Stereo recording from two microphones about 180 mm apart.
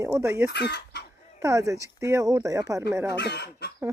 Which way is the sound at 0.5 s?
70° left (ahead or behind).